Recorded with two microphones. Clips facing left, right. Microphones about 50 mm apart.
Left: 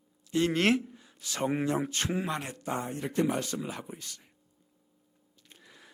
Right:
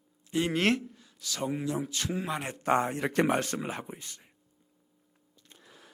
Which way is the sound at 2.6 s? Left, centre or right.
Right.